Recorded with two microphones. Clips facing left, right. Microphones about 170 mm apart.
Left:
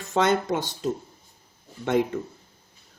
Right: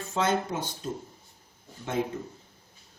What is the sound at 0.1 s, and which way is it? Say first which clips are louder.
Speech: left 5 dB; 75° left (ahead or behind).